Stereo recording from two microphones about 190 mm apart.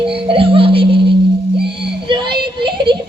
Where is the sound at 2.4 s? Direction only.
25° right (ahead or behind).